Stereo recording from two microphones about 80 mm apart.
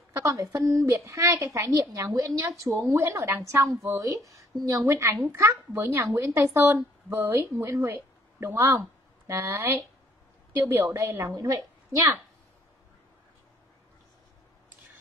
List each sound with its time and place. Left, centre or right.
0.1 s a woman's voice: right
2.9 s a woman's voice: right
11.3 s a woman's voice: right